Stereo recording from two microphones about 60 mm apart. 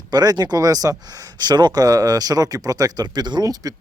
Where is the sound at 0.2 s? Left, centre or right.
Right.